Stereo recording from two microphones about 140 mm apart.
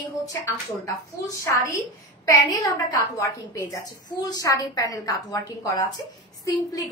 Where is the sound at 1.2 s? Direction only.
20° left (ahead or behind).